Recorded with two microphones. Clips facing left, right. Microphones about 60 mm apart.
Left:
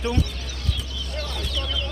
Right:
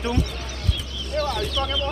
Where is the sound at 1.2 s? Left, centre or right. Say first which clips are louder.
Right 8 dB; right.